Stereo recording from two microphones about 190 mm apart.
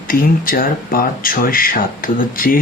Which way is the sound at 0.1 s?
50° left (ahead or behind).